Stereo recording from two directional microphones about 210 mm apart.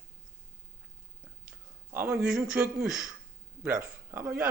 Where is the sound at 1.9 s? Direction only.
5° right (ahead or behind).